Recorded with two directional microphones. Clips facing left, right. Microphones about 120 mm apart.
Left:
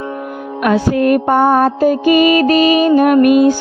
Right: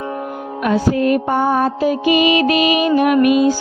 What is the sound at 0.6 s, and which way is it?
Music, 75° left (ahead or behind).